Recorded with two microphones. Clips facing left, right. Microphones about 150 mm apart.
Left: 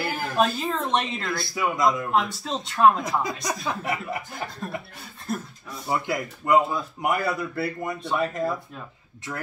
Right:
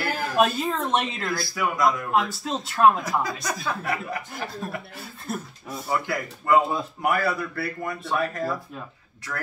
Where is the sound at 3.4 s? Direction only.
20° left (ahead or behind).